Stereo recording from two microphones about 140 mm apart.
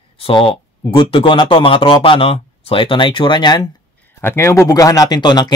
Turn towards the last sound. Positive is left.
turn(degrees=30)  # may be behind; listen again after turning